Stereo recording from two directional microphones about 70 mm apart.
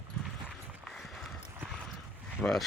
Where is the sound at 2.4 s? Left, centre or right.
Centre.